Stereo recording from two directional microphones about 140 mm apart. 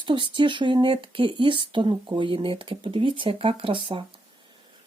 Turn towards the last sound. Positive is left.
turn(degrees=-35)  # may be behind; listen again after turning